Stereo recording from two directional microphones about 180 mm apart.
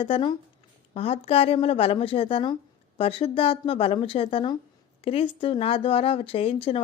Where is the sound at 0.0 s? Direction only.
30° left (ahead or behind).